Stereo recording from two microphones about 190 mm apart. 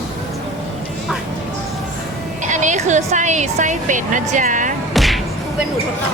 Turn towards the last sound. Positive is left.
turn(degrees=0)  # may be behind; listen again after turning